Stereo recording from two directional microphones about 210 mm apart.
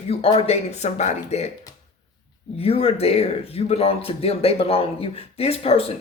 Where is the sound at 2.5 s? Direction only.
30° left (ahead or behind).